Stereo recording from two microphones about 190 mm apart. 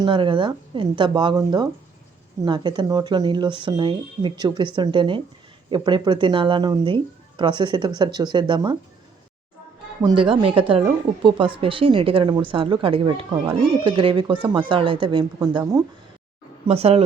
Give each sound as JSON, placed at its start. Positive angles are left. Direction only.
{"t": 0.0, "sound": "speech", "side_deg": -25}
{"t": 10.0, "sound": "speech", "side_deg": -25}
{"t": 16.6, "sound": "speech", "side_deg": -35}